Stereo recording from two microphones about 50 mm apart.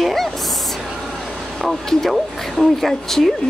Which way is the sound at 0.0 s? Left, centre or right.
Centre.